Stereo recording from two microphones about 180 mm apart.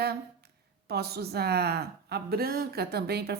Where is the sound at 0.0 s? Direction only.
60° right (ahead or behind).